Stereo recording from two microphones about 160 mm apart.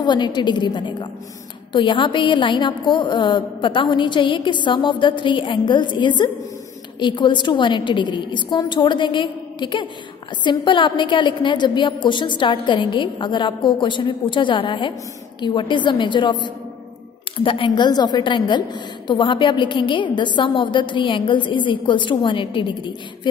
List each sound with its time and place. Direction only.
0.0 s a woman's voice: 30° left (ahead or behind)